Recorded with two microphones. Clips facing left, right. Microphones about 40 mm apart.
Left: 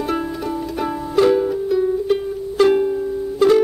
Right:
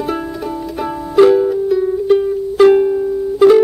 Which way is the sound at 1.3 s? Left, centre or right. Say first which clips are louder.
Right 4 dB; centre.